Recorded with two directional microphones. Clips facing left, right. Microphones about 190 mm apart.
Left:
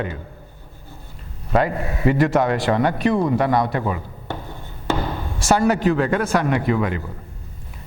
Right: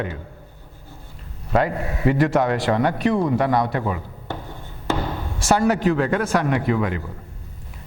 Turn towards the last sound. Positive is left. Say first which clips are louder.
# left 1 dB
turn(degrees=20)  # may be behind; listen again after turning